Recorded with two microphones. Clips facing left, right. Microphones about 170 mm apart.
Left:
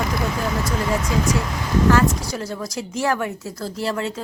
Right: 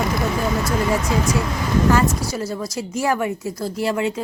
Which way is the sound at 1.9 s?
5° right (ahead or behind).